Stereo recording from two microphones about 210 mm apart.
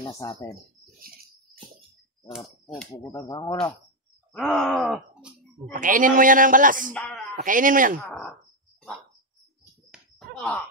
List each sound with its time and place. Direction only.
0.1 s speech: 15° left (ahead or behind)
0.9 s cricket: 45° right (ahead or behind)
2.2 s speech: centre (ahead or behind)
3.1 s speech: 15° left (ahead or behind)
4.3 s speech: centre (ahead or behind)
5.7 s a man's voice: 40° right (ahead or behind)
6.9 s speech: centre (ahead or behind)
7.3 s a man's voice: 40° right (ahead or behind)
8.0 s speech: centre (ahead or behind)
9.8 s a sound: 5° left (ahead or behind)